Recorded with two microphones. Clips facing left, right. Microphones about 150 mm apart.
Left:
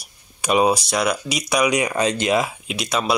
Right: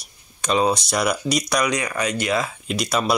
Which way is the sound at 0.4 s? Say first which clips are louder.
Left 2 dB; 10° left (ahead or behind).